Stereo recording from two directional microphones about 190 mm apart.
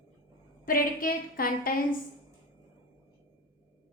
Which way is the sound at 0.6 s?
50° left (ahead or behind).